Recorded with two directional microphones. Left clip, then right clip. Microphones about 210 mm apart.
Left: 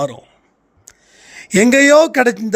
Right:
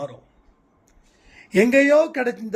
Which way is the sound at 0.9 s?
55° left (ahead or behind).